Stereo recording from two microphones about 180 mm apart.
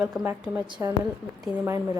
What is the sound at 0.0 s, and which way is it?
Speech, 5° right (ahead or behind).